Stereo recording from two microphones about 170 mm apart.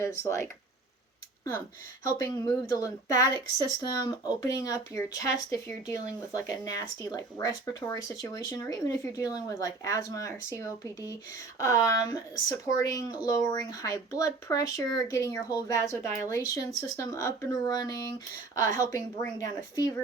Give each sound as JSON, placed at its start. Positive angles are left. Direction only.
{"t": 0.0, "sound": "speech", "side_deg": 15}
{"t": 2.1, "sound": "speech", "side_deg": 20}